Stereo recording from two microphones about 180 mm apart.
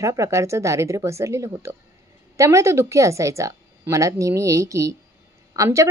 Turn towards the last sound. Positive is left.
turn(degrees=-15)  # may be behind; listen again after turning